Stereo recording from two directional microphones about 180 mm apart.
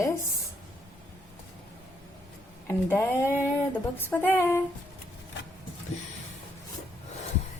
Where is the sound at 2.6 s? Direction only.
15° left (ahead or behind).